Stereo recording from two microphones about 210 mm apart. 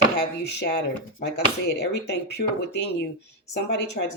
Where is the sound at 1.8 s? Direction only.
55° left (ahead or behind).